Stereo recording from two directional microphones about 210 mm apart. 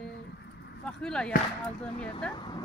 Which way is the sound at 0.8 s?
5° left (ahead or behind).